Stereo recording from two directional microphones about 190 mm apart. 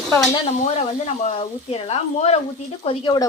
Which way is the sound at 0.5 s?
40° left (ahead or behind).